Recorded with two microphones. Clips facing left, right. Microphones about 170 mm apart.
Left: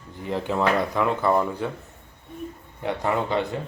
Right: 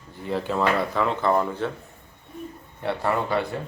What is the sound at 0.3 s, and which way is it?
Speech, 15° left (ahead or behind).